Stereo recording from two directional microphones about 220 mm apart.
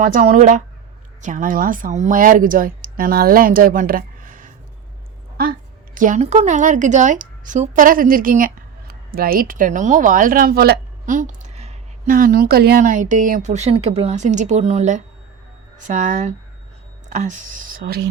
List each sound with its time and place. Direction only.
0.0 s a woman's voice: 35° right (ahead or behind)